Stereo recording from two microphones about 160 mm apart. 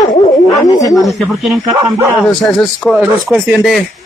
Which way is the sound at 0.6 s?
20° left (ahead or behind).